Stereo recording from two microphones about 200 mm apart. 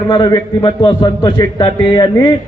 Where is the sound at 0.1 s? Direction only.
20° left (ahead or behind).